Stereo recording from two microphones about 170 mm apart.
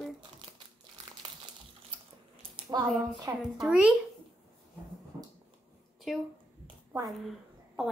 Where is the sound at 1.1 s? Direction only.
30° right (ahead or behind).